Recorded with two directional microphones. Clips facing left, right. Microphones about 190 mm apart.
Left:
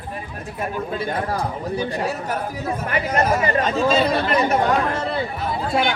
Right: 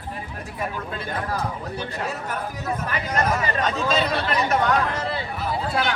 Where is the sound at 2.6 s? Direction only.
30° left (ahead or behind).